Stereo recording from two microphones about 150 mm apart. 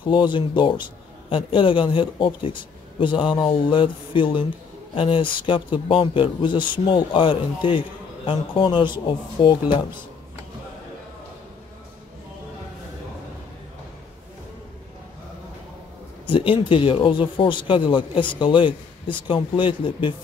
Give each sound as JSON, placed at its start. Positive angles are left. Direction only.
{"t": 0.0, "sound": "speech", "side_deg": 35}
{"t": 16.3, "sound": "speech", "side_deg": 35}